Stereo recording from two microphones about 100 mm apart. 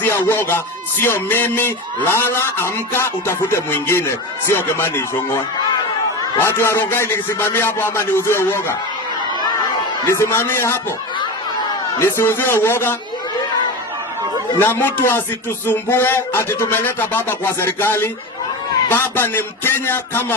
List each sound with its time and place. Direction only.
0.0 s music: 20° left (ahead or behind)
6.4 s music: 25° left (ahead or behind)
10.1 s music: 25° left (ahead or behind)
11.9 s music: 25° left (ahead or behind)
14.6 s music: 20° left (ahead or behind)